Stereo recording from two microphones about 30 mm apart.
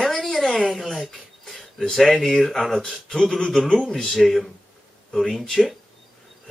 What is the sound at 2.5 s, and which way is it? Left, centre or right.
Speech, centre.